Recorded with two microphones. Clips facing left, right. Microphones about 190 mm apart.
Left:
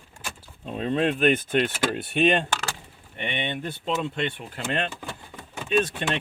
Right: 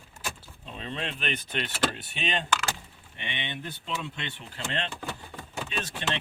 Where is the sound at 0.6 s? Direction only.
45° left (ahead or behind).